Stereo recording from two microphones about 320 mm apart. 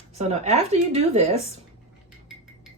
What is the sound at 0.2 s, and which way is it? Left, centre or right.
Speech, centre.